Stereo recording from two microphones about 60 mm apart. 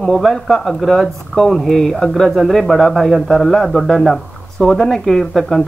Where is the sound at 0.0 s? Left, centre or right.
Centre.